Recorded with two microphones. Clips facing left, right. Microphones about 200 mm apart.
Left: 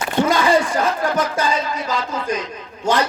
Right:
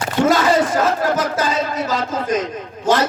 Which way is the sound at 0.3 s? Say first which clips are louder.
Right 3 dB; 45° right (ahead or behind).